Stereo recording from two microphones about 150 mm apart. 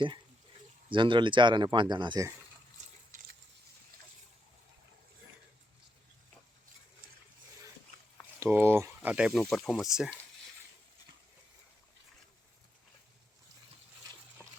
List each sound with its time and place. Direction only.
0.9 s speech: 35° right (ahead or behind)
2.8 s water: 50° right (ahead or behind)
8.4 s speech: 15° right (ahead or behind)
14.4 s dog: 5° left (ahead or behind)